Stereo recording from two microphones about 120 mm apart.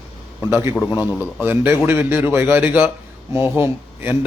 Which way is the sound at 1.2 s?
15° right (ahead or behind).